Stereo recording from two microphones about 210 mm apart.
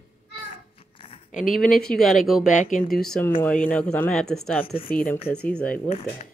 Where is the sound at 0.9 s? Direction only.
25° left (ahead or behind).